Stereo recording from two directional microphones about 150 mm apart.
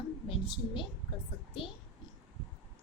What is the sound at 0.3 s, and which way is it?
Speech, 35° left (ahead or behind).